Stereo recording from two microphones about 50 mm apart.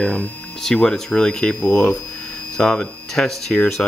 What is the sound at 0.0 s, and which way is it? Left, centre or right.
Speech, left.